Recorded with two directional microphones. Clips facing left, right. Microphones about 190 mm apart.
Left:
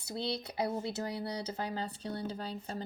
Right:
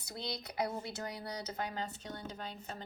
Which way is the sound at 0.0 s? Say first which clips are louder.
Left 6 dB; 25° left (ahead or behind).